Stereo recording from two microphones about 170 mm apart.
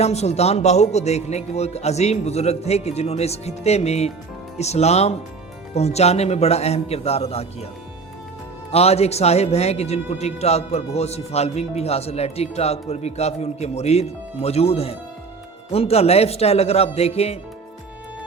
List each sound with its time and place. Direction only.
0.0 s a man's voice: 40° left (ahead or behind)
8.7 s a man's voice: 35° left (ahead or behind)